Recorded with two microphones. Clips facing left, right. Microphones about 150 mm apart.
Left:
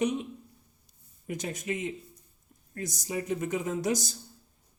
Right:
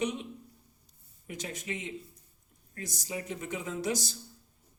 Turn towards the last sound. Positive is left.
turn(degrees=45)  # may be behind; listen again after turning